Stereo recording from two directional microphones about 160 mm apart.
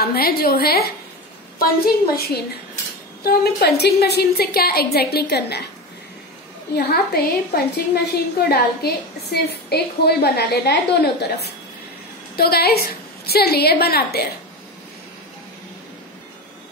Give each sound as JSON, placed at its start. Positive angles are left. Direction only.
{"t": 0.0, "sound": "a woman's voice", "side_deg": 70}
{"t": 2.1, "sound": "a woman's voice", "side_deg": 75}
{"t": 3.3, "sound": "a woman's voice", "side_deg": 90}
{"t": 6.7, "sound": "a woman's voice", "side_deg": 85}
{"t": 12.4, "sound": "a woman's voice", "side_deg": 75}